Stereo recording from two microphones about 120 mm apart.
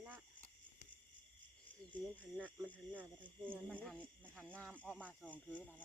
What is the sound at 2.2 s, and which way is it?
Speech, 15° right (ahead or behind).